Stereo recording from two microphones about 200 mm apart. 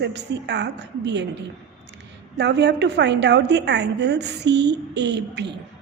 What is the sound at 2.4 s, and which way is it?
A woman's voice, 60° right (ahead or behind).